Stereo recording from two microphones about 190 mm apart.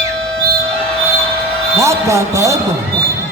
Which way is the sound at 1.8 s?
15° right (ahead or behind).